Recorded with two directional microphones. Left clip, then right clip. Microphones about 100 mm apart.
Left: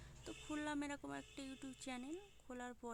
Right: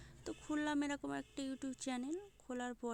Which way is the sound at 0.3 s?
30° right (ahead or behind).